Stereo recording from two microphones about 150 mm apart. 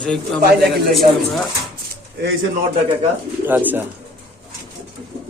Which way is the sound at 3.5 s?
10° right (ahead or behind).